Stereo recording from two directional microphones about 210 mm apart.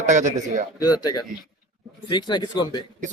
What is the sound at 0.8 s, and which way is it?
Speech, 20° left (ahead or behind).